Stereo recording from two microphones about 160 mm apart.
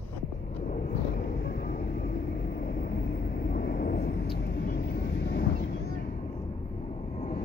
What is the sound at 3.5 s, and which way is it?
Vehicle, 75° left (ahead or behind).